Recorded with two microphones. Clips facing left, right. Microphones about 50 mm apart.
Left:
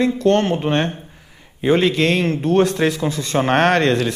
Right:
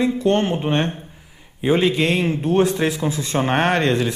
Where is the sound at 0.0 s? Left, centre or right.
Centre.